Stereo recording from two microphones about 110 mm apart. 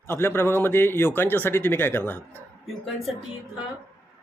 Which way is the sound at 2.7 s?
Centre (ahead or behind).